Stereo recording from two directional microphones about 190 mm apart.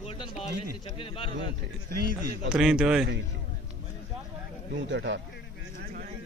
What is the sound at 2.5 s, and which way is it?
Speech, 5° right (ahead or behind).